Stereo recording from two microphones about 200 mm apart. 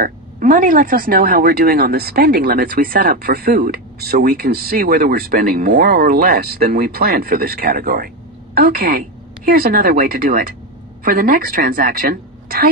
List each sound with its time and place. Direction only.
0.0 s speech: 40° right (ahead or behind)